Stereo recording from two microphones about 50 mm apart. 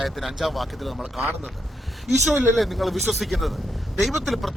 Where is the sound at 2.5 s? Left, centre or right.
Centre.